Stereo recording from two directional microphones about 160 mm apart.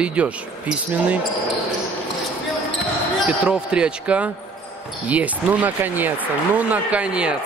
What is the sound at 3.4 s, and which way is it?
Speech, 5° right (ahead or behind).